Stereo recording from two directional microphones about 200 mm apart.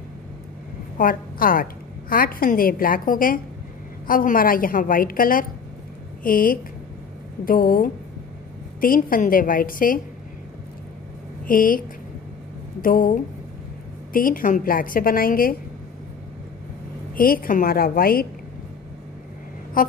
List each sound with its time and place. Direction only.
0.9 s a woman's voice: 45° left (ahead or behind)
11.4 s a woman's voice: 45° left (ahead or behind)
12.8 s a woman's voice: 45° left (ahead or behind)
17.1 s a woman's voice: 45° left (ahead or behind)
19.8 s a woman's voice: 45° left (ahead or behind)